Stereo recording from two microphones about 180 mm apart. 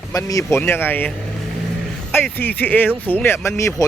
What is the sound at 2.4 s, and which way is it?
Speech, 10° left (ahead or behind).